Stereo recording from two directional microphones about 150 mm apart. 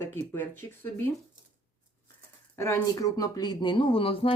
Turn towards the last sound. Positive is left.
turn(degrees=35)  # may be behind; listen again after turning